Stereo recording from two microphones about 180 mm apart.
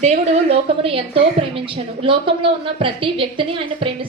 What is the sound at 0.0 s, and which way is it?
A woman's voice, 35° right (ahead or behind).